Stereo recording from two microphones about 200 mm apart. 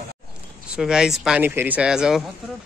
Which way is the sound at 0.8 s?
5° right (ahead or behind).